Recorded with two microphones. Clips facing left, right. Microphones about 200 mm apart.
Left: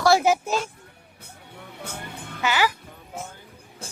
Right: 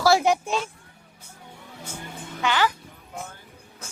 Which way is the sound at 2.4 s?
10° left (ahead or behind).